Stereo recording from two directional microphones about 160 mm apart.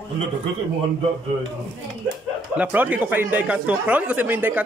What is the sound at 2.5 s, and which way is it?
A man's voice, 10° right (ahead or behind).